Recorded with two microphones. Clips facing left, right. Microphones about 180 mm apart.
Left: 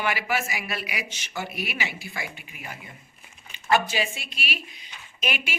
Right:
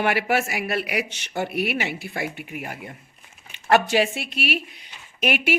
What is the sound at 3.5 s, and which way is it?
A woman's voice, 70° right (ahead or behind).